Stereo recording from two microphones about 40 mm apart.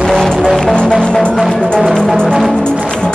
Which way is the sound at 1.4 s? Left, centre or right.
Centre.